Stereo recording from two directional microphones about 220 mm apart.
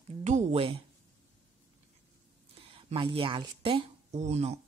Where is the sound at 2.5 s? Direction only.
25° right (ahead or behind).